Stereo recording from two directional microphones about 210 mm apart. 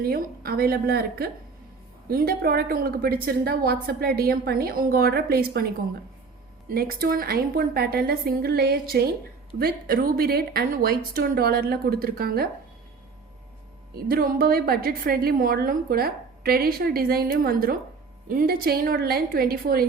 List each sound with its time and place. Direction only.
0.0 s a woman's voice: 45° right (ahead or behind)
13.9 s a woman's voice: 45° right (ahead or behind)